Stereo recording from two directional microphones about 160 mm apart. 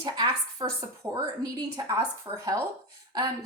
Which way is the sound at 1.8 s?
25° right (ahead or behind).